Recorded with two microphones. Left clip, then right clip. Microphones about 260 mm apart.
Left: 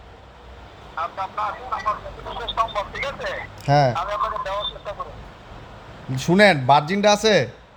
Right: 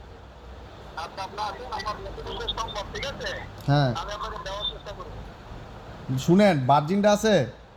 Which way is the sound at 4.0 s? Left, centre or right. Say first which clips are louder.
Left 9 dB; left.